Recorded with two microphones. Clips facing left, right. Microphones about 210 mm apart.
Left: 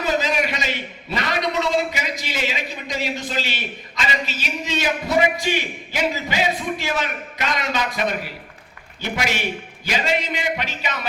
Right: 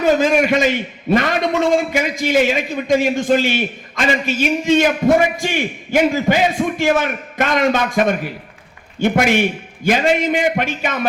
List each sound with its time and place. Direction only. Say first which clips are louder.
0.0 s a man's voice: right 8 dB; 50° right (ahead or behind)